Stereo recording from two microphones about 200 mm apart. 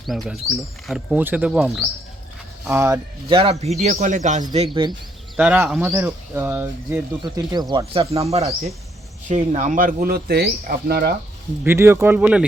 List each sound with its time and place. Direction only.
0.0 s speech: centre (ahead or behind)
2.6 s speech: 15° right (ahead or behind)
3.3 s speech: 30° right (ahead or behind)
4.5 s speech: 25° right (ahead or behind)
5.4 s speech: 5° right (ahead or behind)
7.2 s speech: 20° right (ahead or behind); by 11.1 s 50° right (ahead or behind)
11.6 s speech: 10° right (ahead or behind)